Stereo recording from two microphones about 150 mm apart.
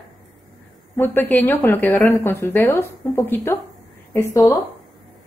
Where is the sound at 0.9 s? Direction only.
15° left (ahead or behind).